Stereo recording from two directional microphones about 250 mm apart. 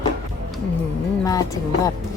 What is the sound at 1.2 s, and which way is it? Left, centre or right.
Speech, centre.